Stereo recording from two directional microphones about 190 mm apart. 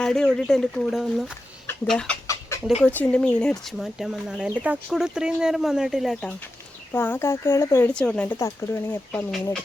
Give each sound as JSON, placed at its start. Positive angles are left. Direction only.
{"t": 0.0, "sound": "speech", "side_deg": 5}
{"t": 2.2, "sound": "chicken", "side_deg": 15}
{"t": 2.8, "sound": "speech", "side_deg": 5}
{"t": 6.9, "sound": "speech", "side_deg": 10}